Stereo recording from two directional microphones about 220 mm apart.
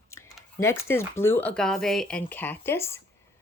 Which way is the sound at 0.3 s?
10° left (ahead or behind).